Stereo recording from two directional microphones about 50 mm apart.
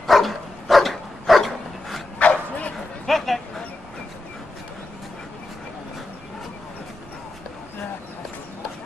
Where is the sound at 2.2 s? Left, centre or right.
Left.